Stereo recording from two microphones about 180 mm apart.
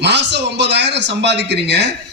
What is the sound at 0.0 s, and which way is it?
Speech, 70° right (ahead or behind).